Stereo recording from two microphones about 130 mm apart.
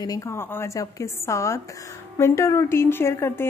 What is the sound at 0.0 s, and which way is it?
Speech, 25° left (ahead or behind).